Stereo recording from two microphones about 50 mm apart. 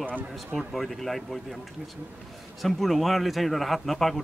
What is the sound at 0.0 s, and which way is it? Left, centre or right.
Speech, right.